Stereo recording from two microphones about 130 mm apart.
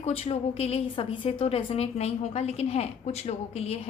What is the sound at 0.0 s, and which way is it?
A woman's voice, 50° left (ahead or behind).